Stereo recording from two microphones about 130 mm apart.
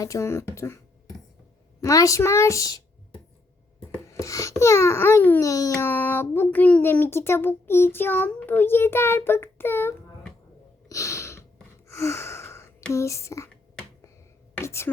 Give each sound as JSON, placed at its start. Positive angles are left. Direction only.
{"t": 0.0, "sound": "a woman's voice", "side_deg": 25}
{"t": 1.8, "sound": "a woman's voice", "side_deg": 25}
{"t": 3.9, "sound": "speech", "side_deg": 25}
{"t": 5.4, "sound": "a child's voice", "side_deg": 25}
{"t": 10.8, "sound": "a sound", "side_deg": 25}
{"t": 11.9, "sound": "gasp", "side_deg": 20}
{"t": 12.9, "sound": "a woman's voice", "side_deg": 25}
{"t": 14.6, "sound": "whispering", "side_deg": 20}